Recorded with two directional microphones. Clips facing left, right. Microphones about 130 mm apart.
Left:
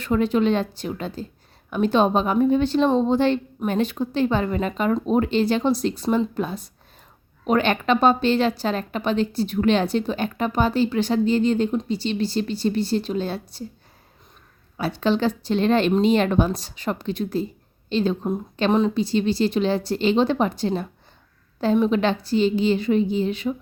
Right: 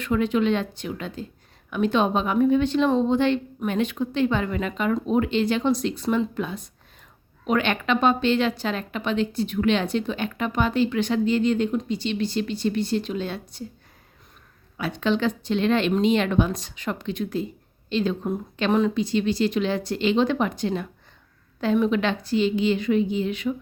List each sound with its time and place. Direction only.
0.0 s speech: 35° left (ahead or behind)
14.8 s speech: 35° left (ahead or behind)